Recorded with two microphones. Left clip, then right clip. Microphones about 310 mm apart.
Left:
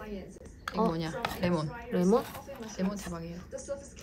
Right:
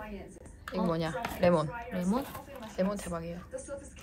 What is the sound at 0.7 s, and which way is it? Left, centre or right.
Speech, centre.